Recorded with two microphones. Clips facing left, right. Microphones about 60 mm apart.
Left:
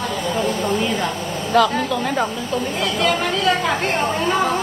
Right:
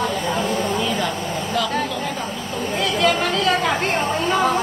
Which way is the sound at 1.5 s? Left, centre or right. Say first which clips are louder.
Left 9 dB; left.